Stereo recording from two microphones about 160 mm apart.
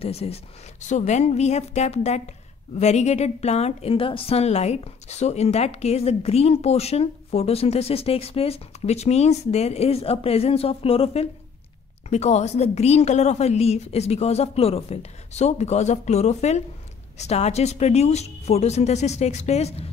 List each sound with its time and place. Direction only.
0.0 s a woman's voice: 40° left (ahead or behind)